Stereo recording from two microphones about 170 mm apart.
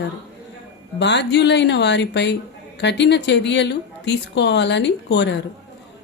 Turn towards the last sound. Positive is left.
turn(degrees=90)